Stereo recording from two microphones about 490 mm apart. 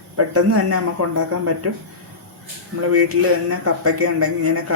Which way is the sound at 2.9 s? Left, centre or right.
Right.